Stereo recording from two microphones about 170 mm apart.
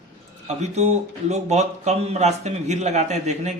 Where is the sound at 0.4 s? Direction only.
40° right (ahead or behind).